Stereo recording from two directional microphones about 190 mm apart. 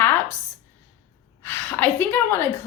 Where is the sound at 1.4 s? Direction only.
10° left (ahead or behind).